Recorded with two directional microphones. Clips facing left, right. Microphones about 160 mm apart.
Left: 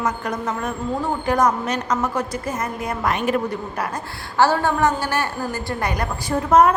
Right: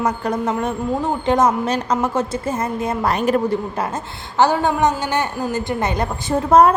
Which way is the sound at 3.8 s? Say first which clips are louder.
Right 3 dB; 25° right (ahead or behind).